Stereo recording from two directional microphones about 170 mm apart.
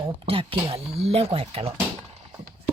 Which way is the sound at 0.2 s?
35° right (ahead or behind).